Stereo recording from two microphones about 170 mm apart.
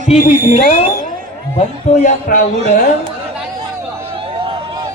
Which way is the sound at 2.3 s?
60° left (ahead or behind).